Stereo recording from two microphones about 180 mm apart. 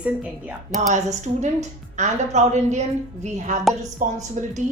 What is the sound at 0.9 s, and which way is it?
A woman's voice, 40° right (ahead or behind).